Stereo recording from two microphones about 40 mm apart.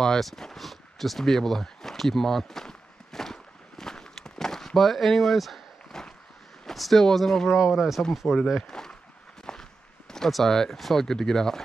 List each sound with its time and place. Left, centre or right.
0.0 s a sound: centre
5.9 s a sound: centre
6.6 s speech: centre
7.5 s speech: centre
8.5 s speech: centre
9.5 s walk: centre
10.3 s speech: centre